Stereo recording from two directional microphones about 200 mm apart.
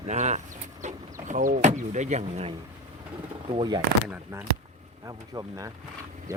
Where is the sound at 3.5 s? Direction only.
20° right (ahead or behind).